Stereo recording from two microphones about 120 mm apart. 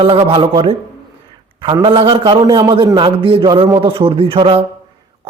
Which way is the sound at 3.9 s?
55° right (ahead or behind).